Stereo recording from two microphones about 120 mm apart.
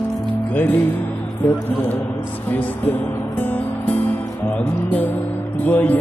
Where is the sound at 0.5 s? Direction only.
20° left (ahead or behind).